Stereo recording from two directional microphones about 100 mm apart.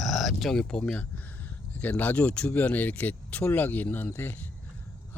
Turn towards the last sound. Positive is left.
turn(degrees=20)  # may be behind; listen again after turning